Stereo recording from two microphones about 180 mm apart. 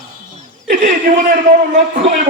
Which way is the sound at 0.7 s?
45° right (ahead or behind).